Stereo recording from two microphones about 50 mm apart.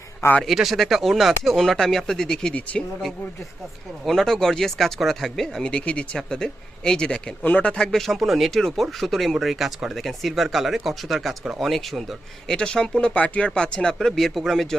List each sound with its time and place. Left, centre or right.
0.4 s speech: centre
4.0 s speech: centre
5.6 s speech: left
7.8 s speech: centre
12.5 s speech: centre
14.2 s speech: centre